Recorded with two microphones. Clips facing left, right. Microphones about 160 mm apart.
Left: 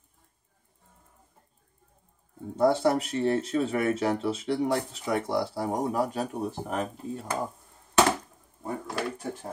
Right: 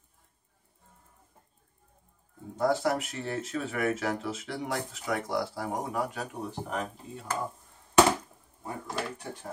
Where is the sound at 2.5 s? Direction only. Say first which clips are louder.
Left 4 dB; 30° left (ahead or behind).